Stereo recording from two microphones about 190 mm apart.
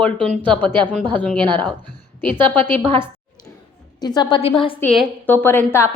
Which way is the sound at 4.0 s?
20° left (ahead or behind).